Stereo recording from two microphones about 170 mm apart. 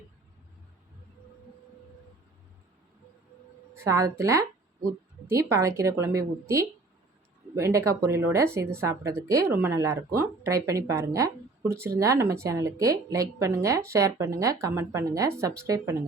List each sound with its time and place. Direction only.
3.8 s a woman's voice: 20° right (ahead or behind)
7.5 s a woman's voice: 15° right (ahead or behind)